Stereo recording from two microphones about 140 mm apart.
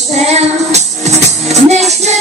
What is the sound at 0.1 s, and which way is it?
Music, 50° right (ahead or behind).